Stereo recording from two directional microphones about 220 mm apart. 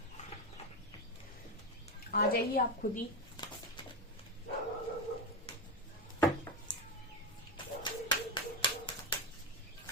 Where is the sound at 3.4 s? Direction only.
20° left (ahead or behind).